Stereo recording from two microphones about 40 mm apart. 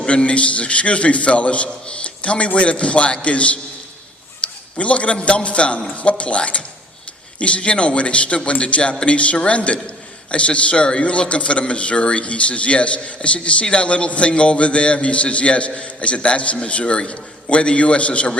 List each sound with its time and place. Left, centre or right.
0.0 s a man's voice: left